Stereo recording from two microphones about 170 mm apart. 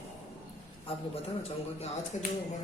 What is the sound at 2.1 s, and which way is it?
Speech, 40° left (ahead or behind).